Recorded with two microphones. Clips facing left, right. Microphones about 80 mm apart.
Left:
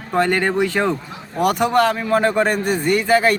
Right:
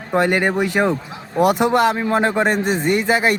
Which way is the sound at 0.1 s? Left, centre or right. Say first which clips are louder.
Right 1 dB; centre.